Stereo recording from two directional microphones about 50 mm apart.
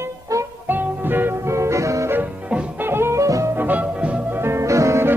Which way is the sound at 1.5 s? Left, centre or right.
Right.